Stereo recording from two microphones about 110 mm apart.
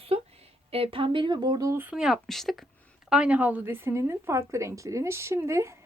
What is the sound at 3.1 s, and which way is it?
A woman's voice, 10° right (ahead or behind).